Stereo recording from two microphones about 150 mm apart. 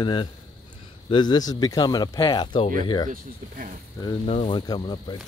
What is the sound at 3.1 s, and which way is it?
Speech, 65° right (ahead or behind).